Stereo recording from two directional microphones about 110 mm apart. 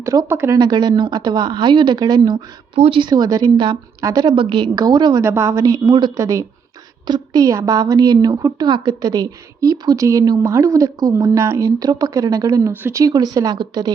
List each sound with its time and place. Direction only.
0.0 s a woman's voice: 30° right (ahead or behind)
0.6 s speech: 40° right (ahead or behind)
2.7 s speech: 70° right (ahead or behind)
3.0 s a woman's voice: 40° right (ahead or behind)
4.7 s a woman's voice: 35° right (ahead or behind)
5.2 s a woman's voice: 20° right (ahead or behind)
5.6 s a woman's voice: 35° right (ahead or behind)